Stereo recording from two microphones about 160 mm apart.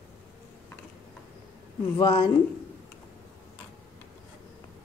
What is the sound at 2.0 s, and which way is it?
Speech, 30° left (ahead or behind).